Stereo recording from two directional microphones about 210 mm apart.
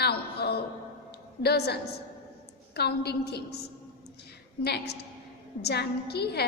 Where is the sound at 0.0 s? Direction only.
50° left (ahead or behind).